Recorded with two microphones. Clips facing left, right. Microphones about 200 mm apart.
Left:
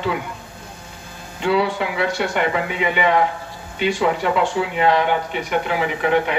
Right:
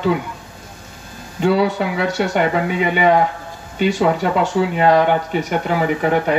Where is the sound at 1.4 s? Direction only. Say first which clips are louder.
Right 3 dB; 40° right (ahead or behind).